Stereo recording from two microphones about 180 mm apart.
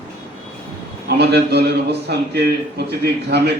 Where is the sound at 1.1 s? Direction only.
65° right (ahead or behind).